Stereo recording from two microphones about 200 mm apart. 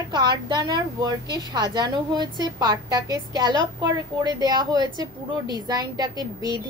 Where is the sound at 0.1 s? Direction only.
20° right (ahead or behind).